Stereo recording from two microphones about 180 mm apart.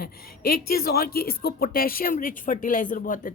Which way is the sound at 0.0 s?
60° left (ahead or behind).